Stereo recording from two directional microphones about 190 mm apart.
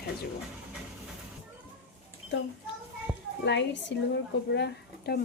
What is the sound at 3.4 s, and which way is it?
A woman's voice, 65° left (ahead or behind).